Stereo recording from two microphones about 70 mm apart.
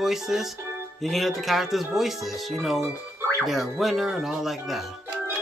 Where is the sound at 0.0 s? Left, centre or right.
Centre.